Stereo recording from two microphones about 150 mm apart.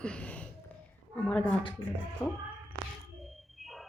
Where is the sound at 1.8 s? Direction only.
30° left (ahead or behind).